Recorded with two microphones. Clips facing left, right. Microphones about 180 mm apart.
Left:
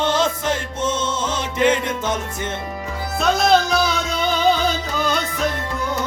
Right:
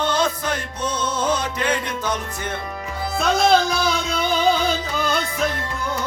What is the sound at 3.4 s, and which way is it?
Music, centre (ahead or behind).